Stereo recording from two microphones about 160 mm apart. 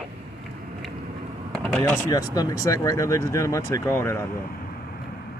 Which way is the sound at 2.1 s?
25° left (ahead or behind).